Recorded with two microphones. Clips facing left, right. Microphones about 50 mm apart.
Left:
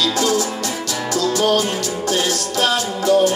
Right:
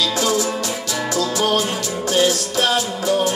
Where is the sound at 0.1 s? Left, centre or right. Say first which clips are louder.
Left 1 dB; centre.